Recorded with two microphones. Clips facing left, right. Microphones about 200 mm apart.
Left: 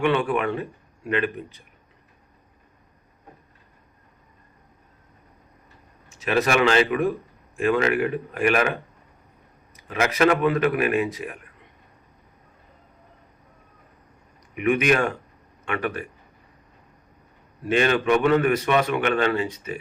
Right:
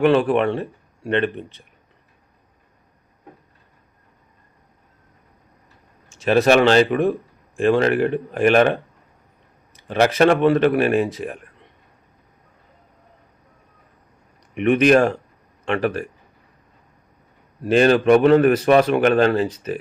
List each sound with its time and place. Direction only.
0.0 s speech: 35° right (ahead or behind)
6.1 s speech: 30° right (ahead or behind)
9.8 s speech: 35° right (ahead or behind)
14.6 s a man's voice: 35° right (ahead or behind)
17.7 s speech: 35° right (ahead or behind)